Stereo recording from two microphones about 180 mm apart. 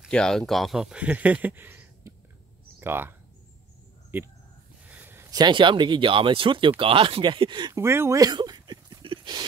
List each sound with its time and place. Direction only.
0.0 s speech: 5° left (ahead or behind)
4.8 s a sound: 10° right (ahead or behind)
5.3 s speech: 25° right (ahead or behind)